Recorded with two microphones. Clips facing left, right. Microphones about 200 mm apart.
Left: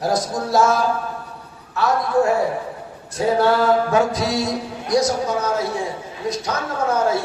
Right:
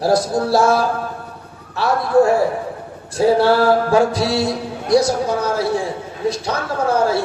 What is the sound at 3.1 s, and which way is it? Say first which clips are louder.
Mantra: right 4 dB; 30° right (ahead or behind).